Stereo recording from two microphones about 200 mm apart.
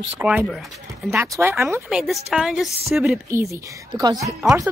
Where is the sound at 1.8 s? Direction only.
Centre (ahead or behind).